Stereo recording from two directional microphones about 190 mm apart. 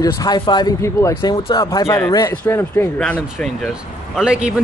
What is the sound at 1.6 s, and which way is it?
Speech, 20° left (ahead or behind).